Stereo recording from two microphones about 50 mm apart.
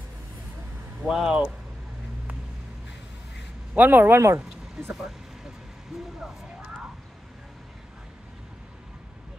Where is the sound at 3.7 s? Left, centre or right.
Right.